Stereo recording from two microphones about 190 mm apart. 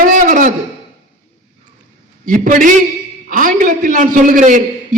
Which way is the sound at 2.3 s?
45° right (ahead or behind).